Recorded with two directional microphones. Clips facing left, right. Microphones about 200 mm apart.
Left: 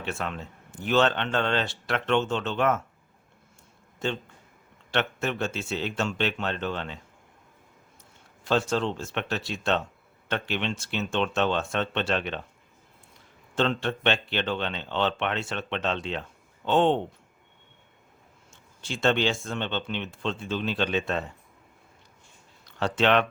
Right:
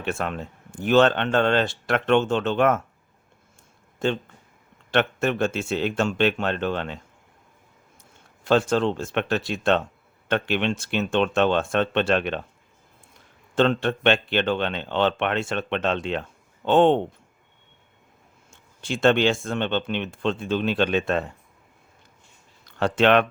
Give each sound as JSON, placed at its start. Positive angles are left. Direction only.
{"t": 0.0, "sound": "speech", "side_deg": -50}
{"t": 4.9, "sound": "speech", "side_deg": -50}
{"t": 8.4, "sound": "speech", "side_deg": -55}
{"t": 13.6, "sound": "speech", "side_deg": -55}
{"t": 18.8, "sound": "speech", "side_deg": -55}
{"t": 22.8, "sound": "speech", "side_deg": -55}